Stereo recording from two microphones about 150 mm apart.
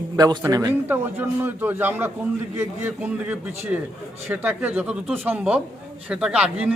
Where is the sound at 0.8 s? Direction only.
15° right (ahead or behind).